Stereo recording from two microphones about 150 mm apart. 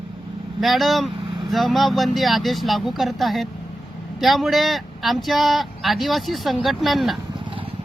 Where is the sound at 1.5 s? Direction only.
Centre (ahead or behind).